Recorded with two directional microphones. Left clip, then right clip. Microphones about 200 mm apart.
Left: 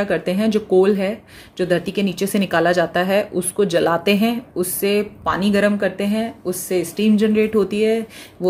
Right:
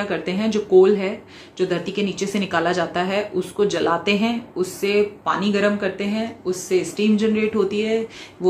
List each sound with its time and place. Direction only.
0.0 s speech: 50° left (ahead or behind)